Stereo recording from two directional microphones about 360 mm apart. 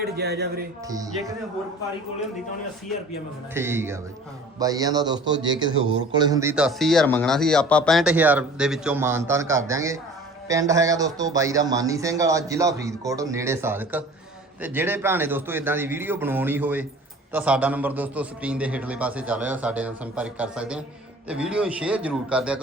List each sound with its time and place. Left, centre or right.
0.0 s speech: right
0.9 s a man's voice: centre
3.5 s a man's voice: centre